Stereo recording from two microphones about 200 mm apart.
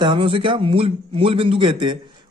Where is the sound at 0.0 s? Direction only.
25° right (ahead or behind).